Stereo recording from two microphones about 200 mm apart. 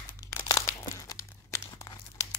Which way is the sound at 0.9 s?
15° left (ahead or behind).